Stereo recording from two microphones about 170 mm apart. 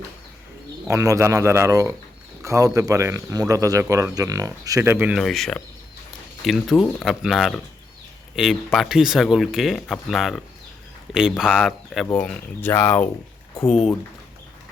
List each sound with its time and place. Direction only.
0.9 s speech: 15° right (ahead or behind)
5.2 s speech: centre (ahead or behind)